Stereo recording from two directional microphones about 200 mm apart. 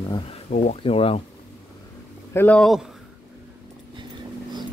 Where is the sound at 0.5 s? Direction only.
35° left (ahead or behind).